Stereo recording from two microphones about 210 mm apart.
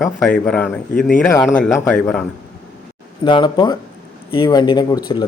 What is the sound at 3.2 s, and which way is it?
Speech, 20° left (ahead or behind).